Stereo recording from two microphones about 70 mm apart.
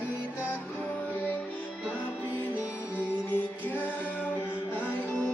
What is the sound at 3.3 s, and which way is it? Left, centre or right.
Music, left.